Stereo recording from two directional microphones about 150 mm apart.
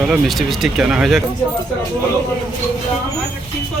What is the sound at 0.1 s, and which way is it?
Speech, centre (ahead or behind).